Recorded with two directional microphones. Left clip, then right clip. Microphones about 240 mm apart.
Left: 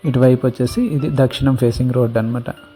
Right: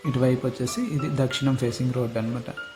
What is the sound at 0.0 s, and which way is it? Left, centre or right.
Speech, left.